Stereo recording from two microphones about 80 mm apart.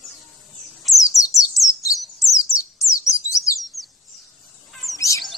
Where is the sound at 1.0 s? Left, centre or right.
Left.